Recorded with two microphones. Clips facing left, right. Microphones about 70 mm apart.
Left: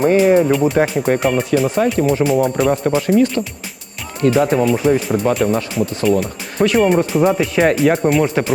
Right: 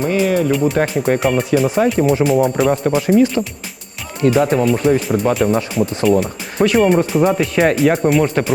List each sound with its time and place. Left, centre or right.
0.3 s speech: left
0.5 s speech: centre